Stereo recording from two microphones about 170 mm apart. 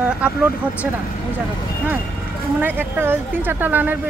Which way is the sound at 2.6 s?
10° right (ahead or behind).